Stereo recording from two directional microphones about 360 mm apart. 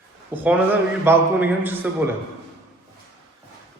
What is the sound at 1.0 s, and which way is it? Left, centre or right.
A man's voice, centre.